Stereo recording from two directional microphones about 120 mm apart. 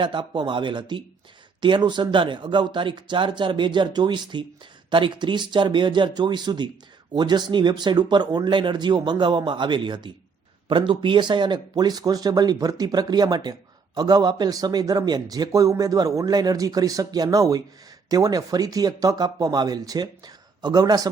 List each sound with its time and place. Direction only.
0.0 s speech: 40° right (ahead or behind)